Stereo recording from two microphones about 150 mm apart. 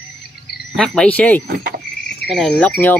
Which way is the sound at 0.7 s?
5° left (ahead or behind).